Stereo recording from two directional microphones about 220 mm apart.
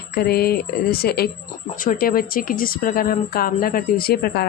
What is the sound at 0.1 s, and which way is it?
Speech, 45° left (ahead or behind).